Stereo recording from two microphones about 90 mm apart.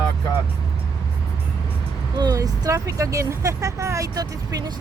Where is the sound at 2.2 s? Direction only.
45° right (ahead or behind).